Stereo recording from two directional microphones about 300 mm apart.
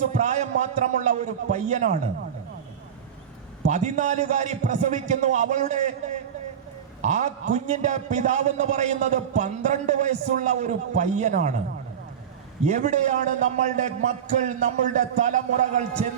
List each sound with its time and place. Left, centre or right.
0.0 s a man's voice: right
3.7 s a man's voice: right
7.0 s a man's voice: right
12.6 s a man's voice: right